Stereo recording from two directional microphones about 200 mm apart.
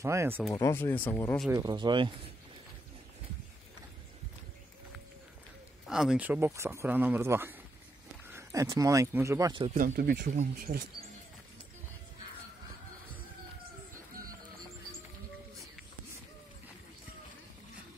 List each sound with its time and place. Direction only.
0.0 s speech: 15° right (ahead or behind)
0.6 s speech: 15° left (ahead or behind)
1.5 s speech: 15° right (ahead or behind)
5.9 s speech: 5° right (ahead or behind); by 9.7 s 20° right (ahead or behind)
9.8 s speech: 45° right (ahead or behind)